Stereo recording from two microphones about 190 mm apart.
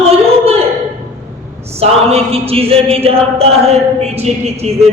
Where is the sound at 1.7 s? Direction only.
30° right (ahead or behind).